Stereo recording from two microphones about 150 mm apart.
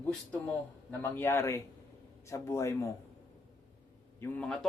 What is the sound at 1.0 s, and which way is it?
A man's voice, 15° left (ahead or behind).